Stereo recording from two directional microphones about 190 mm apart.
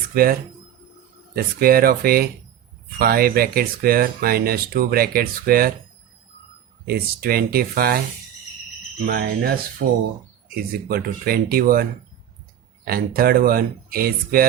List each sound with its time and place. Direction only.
0.1 s speech: 50° right (ahead or behind)
1.5 s speech: 50° right (ahead or behind)
6.8 s speech: 50° right (ahead or behind)
9.0 s speech: 55° right (ahead or behind)